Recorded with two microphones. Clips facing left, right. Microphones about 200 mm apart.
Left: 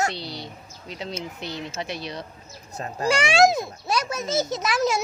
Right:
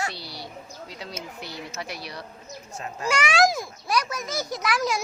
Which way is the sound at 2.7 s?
35° left (ahead or behind).